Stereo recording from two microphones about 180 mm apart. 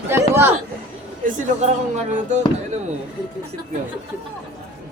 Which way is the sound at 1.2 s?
45° right (ahead or behind).